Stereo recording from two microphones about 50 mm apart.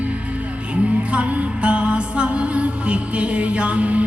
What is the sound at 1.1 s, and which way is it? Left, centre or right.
Music, right.